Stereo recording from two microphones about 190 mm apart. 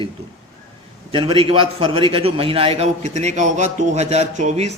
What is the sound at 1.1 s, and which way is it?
A man's voice, 25° right (ahead or behind).